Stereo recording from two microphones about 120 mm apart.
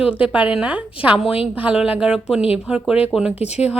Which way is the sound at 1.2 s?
55° left (ahead or behind).